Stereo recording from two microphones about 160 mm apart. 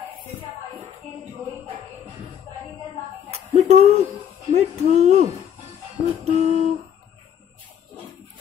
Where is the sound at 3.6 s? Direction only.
40° right (ahead or behind).